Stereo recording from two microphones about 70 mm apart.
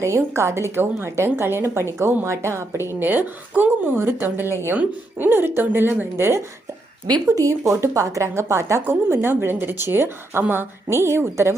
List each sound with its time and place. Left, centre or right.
0.0 s a woman's voice: right
7.3 s a woman's voice: right
10.9 s a woman's voice: right